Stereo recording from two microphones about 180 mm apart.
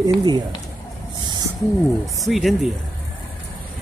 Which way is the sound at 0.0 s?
25° right (ahead or behind).